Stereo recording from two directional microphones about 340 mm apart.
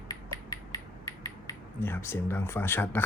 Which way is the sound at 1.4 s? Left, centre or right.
Centre.